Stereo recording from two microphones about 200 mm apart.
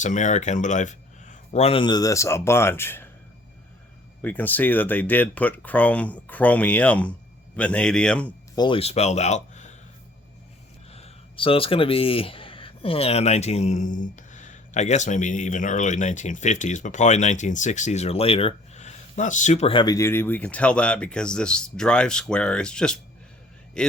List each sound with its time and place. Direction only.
0.0 s speech: 35° left (ahead or behind); by 3.1 s 10° left (ahead or behind)
4.2 s speech: 10° left (ahead or behind)
8.5 s speech: 25° left (ahead or behind)
10.9 s a man's voice: 30° left (ahead or behind); by 23.9 s 5° left (ahead or behind)